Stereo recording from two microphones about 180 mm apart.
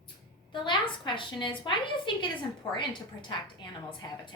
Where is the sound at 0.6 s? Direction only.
25° left (ahead or behind).